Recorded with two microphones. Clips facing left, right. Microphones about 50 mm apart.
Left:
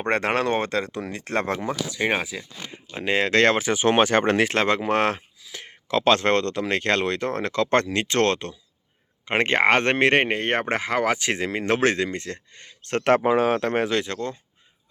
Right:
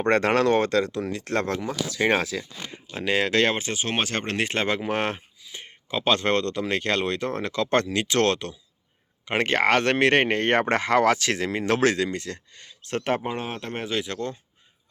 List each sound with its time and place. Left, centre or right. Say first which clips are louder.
0.0 s speech: right 2 dB; left
1.7 s speech: right 3 dB; centre
3.0 s speech: left 2 dB; left
4.4 s speech: left 4 dB; left
6.0 s speech: left 3 dB; left
10.2 s speech: right 2 dB; centre; by 12.7 s left
12.8 s speech: left 6 dB; left
13.1 s speech: left 10 dB; left